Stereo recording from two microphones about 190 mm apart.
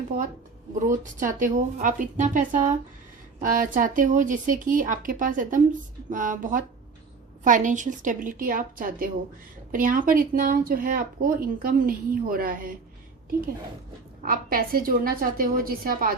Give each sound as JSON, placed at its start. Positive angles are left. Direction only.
{"t": 0.1, "sound": "speech", "side_deg": -50}
{"t": 14.2, "sound": "speech", "side_deg": -50}